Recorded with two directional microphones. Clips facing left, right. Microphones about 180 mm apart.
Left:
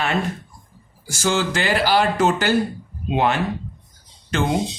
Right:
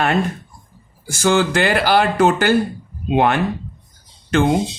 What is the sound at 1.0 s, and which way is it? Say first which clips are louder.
Speech: right 5 dB; 55° right (ahead or behind).